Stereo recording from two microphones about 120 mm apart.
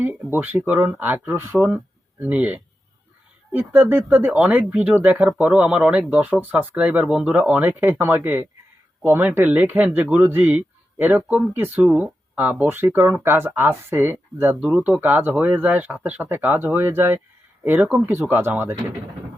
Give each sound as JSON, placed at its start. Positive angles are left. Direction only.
{"t": 0.0, "sound": "speech", "side_deg": -15}